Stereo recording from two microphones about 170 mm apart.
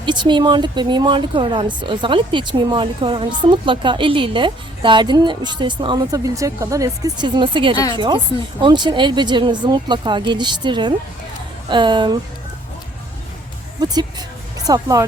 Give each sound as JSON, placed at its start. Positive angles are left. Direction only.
{"t": 0.0, "sound": "speech", "side_deg": -25}
{"t": 13.7, "sound": "speech", "side_deg": -25}